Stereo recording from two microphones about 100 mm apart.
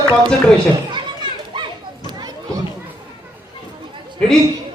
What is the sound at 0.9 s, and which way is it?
Children playing, 50° right (ahead or behind).